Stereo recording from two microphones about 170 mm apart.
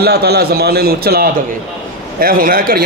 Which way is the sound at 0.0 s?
70° right (ahead or behind).